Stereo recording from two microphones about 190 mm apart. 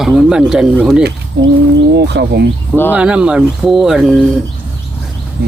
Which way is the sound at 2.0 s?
60° right (ahead or behind).